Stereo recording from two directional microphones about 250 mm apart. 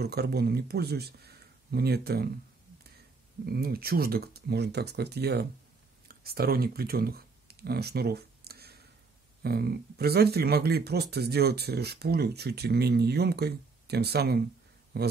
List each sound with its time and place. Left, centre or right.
0.0 s speech: right
3.4 s speech: right
6.0 s a sound: right
9.4 s speech: right